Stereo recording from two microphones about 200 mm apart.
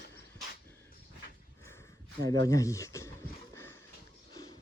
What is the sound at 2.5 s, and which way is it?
Speech, 15° left (ahead or behind).